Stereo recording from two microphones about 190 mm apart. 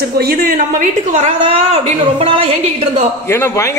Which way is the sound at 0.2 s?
55° right (ahead or behind).